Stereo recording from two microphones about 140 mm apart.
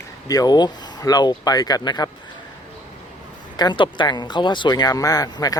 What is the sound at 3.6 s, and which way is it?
Speech, 35° left (ahead or behind).